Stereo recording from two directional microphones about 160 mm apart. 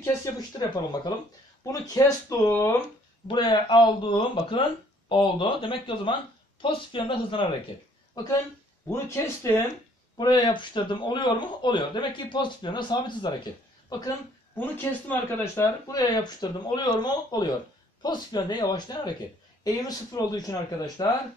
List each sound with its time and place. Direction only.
0.0 s speech: 20° left (ahead or behind)
3.3 s speech: 30° left (ahead or behind)
10.1 s speech: 25° left (ahead or behind)
14.6 s speech: 10° left (ahead or behind)
15.6 s speech: 25° left (ahead or behind)